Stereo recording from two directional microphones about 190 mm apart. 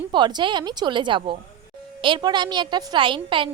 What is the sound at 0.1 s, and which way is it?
A woman's voice, 25° right (ahead or behind).